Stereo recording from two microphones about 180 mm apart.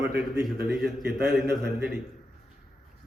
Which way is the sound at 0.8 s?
15° right (ahead or behind).